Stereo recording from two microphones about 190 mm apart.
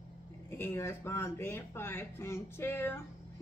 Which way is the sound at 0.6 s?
15° left (ahead or behind).